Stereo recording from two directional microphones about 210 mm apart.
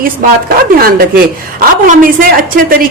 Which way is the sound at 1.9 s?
40° right (ahead or behind).